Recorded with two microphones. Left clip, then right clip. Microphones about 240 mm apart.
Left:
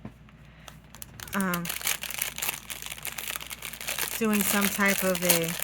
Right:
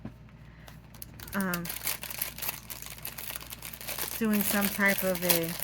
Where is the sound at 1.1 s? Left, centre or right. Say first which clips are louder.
Left 3 dB; left.